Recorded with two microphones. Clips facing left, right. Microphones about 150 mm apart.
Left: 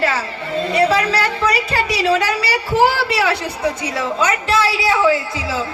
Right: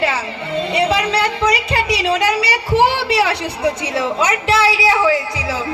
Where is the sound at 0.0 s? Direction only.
20° right (ahead or behind).